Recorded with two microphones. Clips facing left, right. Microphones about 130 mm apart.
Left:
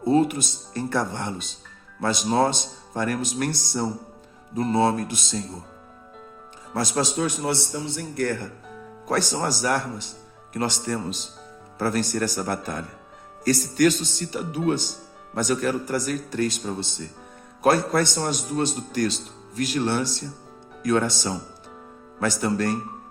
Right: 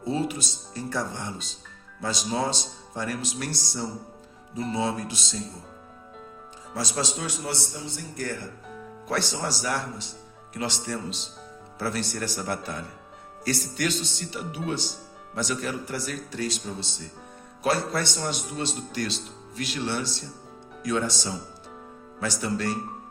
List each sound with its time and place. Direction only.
0.0 s speech: 55° left (ahead or behind)
6.7 s speech: 55° left (ahead or behind)
9.0 s speech: 45° left (ahead or behind)